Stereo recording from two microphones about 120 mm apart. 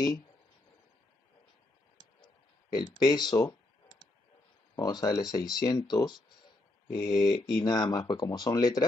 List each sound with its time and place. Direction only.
2.7 s speech: 35° left (ahead or behind)
4.7 s speech: 30° left (ahead or behind)